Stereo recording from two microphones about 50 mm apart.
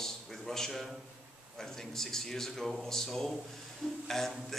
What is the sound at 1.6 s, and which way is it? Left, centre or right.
A man's voice, centre.